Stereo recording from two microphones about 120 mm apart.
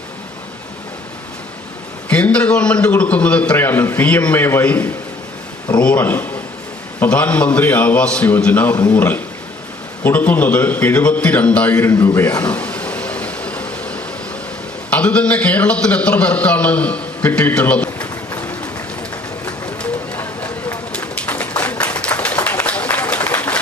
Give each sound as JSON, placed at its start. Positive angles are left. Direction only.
{"t": 2.0, "sound": "a man's voice", "side_deg": 10}
{"t": 19.8, "sound": "run", "side_deg": 10}
{"t": 20.9, "sound": "a sound", "side_deg": 10}